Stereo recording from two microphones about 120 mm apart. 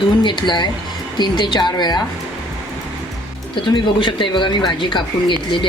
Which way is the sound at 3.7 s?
45° left (ahead or behind).